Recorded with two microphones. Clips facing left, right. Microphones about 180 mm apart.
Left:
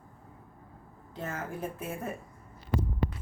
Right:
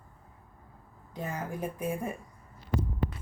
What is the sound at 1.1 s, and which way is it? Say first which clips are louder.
Speech: right 1 dB; 15° right (ahead or behind).